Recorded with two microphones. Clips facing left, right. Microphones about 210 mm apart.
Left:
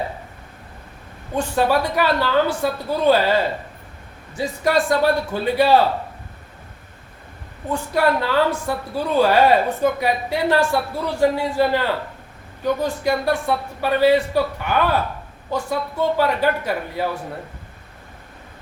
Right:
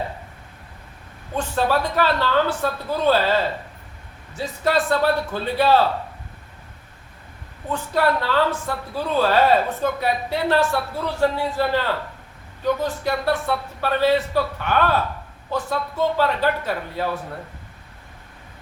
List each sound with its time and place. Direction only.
1.4 s a woman's voice: 10° left (ahead or behind)
7.7 s a woman's voice: 10° left (ahead or behind)